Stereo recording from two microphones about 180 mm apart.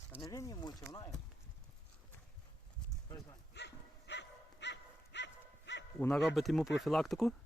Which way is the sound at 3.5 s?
75° left (ahead or behind).